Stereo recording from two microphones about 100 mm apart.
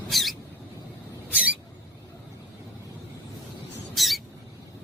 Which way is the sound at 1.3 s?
10° right (ahead or behind).